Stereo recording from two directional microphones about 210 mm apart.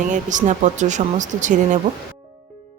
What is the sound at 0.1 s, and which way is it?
Speech, 35° right (ahead or behind).